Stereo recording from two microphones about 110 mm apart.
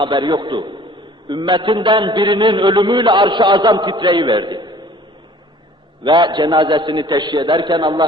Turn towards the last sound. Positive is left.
turn(degrees=-45)  # may be behind; listen again after turning